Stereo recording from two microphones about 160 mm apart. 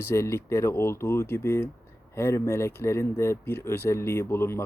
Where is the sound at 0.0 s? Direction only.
15° left (ahead or behind).